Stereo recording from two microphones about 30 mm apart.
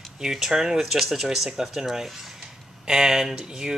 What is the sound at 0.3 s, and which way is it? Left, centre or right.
Speech, centre.